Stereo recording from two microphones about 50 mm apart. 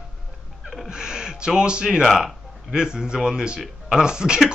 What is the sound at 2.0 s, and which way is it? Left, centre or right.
A man's voice, centre.